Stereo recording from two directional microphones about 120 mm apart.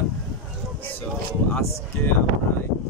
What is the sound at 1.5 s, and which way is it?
Speech, 15° left (ahead or behind).